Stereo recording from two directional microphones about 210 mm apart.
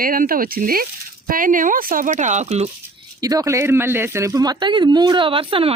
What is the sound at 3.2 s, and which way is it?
Speech, 15° right (ahead or behind).